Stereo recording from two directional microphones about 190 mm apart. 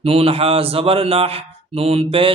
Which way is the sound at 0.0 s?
30° right (ahead or behind).